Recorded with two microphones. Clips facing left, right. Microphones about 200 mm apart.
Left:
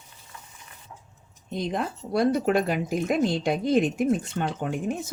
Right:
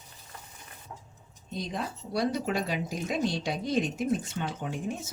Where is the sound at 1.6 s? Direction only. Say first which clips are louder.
Left 7 dB; 55° left (ahead or behind).